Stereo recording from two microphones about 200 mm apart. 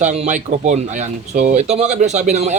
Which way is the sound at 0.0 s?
35° right (ahead or behind).